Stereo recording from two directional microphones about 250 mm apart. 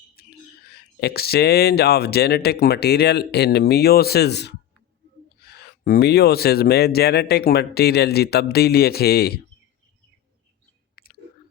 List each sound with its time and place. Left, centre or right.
0.2 s speech: left
10.9 s chewing: left